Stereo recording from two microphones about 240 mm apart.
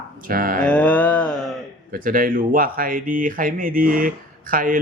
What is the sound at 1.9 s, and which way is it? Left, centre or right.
Speech, right.